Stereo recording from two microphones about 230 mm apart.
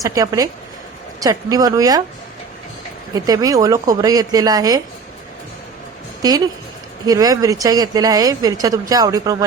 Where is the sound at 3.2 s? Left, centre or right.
Centre.